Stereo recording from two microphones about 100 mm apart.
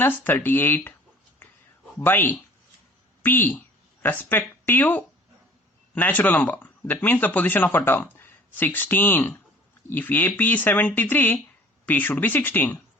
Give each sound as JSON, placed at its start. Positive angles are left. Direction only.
{"t": 0.0, "sound": "speech", "side_deg": 20}
{"t": 1.4, "sound": "a sound", "side_deg": 20}
{"t": 2.0, "sound": "speech", "side_deg": 20}